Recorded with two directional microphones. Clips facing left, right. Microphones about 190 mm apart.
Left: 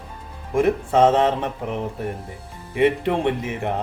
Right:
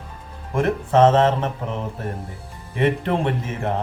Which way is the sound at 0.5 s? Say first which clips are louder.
Even; 15° left (ahead or behind).